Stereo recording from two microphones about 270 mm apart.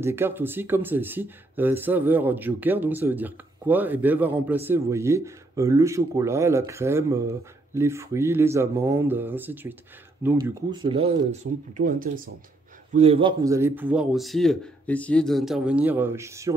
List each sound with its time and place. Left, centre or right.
0.0 s speech: centre
10.8 s a man's voice: right